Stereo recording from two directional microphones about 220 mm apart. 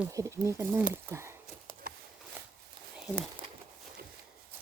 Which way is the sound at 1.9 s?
40° right (ahead or behind).